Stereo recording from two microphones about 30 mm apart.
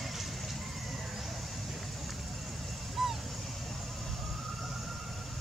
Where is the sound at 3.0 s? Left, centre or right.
Centre.